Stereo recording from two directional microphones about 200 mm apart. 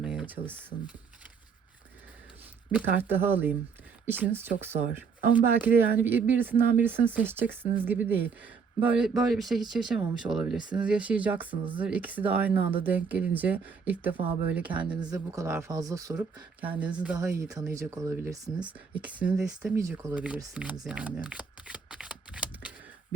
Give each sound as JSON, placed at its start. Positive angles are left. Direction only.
{"t": 0.0, "sound": "a sound", "side_deg": -5}
{"t": 2.7, "sound": "speech", "side_deg": -10}
{"t": 19.8, "sound": "speech", "side_deg": -15}
{"t": 20.8, "sound": "shuffling cards", "side_deg": -5}